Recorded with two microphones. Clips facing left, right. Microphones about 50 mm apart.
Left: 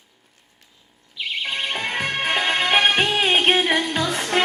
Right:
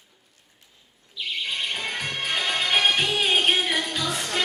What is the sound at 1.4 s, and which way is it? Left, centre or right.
Music, left.